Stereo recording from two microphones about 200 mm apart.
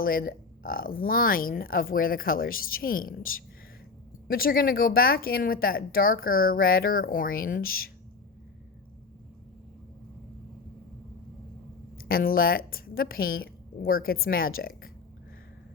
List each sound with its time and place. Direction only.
0.0 s a woman's voice: 45° left (ahead or behind)
11.9 s a woman's voice: 45° left (ahead or behind)